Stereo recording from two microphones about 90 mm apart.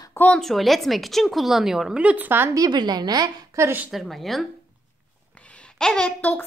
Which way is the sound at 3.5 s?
30° right (ahead or behind).